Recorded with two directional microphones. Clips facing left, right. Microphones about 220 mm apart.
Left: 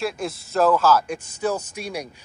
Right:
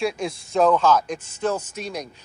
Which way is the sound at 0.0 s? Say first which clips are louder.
Right 2 dB; 5° left (ahead or behind).